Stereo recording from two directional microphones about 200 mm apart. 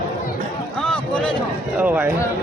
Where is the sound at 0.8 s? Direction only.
5° left (ahead or behind).